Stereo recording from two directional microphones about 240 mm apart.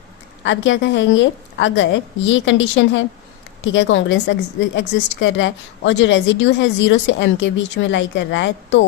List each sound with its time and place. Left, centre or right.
0.4 s a woman's voice: left